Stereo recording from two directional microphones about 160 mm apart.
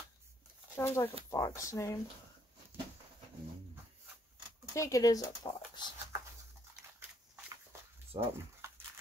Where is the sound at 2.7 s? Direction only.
15° right (ahead or behind).